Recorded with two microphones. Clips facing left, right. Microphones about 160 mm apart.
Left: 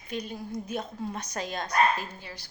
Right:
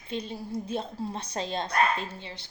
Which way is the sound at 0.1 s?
30° right (ahead or behind).